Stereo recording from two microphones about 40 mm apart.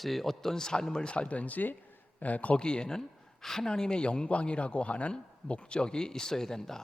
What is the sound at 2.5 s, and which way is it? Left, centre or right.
Speech, left.